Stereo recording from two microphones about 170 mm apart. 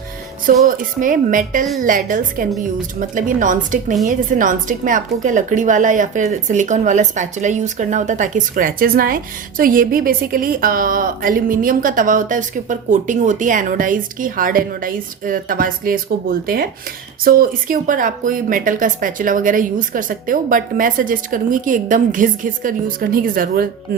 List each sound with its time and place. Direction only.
0.7 s a woman's voice: 50° right (ahead or behind)
17.2 s a woman's voice: 60° right (ahead or behind)